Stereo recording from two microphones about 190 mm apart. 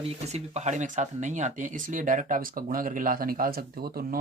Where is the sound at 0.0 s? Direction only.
35° right (ahead or behind).